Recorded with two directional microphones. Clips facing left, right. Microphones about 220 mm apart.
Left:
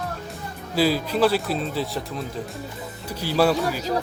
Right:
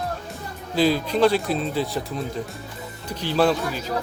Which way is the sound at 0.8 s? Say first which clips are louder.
Right 1 dB; 5° left (ahead or behind).